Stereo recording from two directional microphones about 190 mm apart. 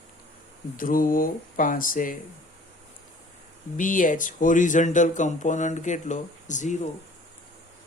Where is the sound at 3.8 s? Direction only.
45° left (ahead or behind).